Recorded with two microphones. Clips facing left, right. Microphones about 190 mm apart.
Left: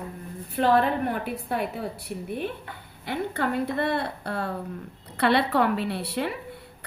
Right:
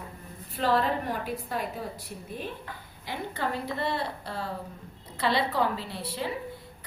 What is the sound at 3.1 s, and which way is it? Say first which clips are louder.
A woman's voice: left 5 dB; 60° left (ahead or behind).